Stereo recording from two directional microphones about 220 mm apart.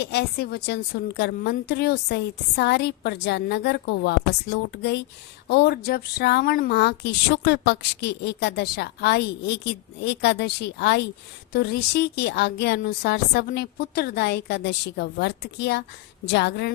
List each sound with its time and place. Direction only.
0.0 s a woman's voice: 50° left (ahead or behind)